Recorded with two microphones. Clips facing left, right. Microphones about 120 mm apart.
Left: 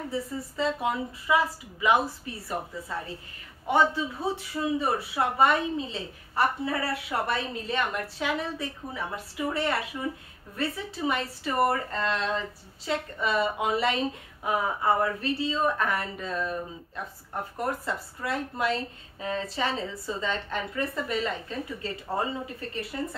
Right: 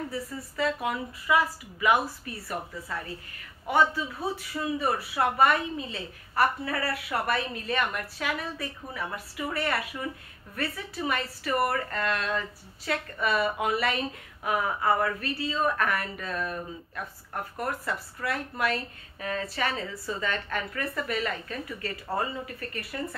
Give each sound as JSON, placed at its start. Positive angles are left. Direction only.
{"t": 0.1, "sound": "a woman's voice", "side_deg": 25}